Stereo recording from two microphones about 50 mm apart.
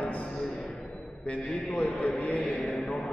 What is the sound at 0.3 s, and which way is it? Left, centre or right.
Music, centre.